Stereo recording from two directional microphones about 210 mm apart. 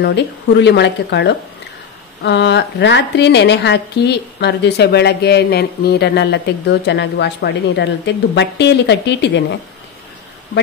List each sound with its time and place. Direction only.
0.0 s a woman's voice: 55° left (ahead or behind)